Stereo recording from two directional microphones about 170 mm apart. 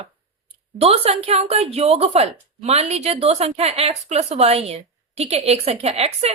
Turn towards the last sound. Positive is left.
turn(degrees=-40)  # may be behind; listen again after turning